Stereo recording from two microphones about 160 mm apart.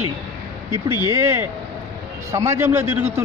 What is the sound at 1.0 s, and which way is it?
A man's voice, 15° right (ahead or behind).